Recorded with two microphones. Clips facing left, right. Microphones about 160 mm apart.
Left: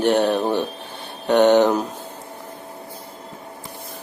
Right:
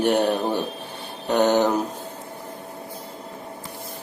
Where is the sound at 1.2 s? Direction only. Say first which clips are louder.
Left 5 dB; 70° left (ahead or behind).